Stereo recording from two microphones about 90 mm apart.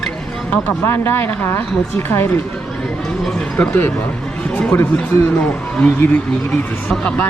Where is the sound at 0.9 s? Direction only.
25° left (ahead or behind).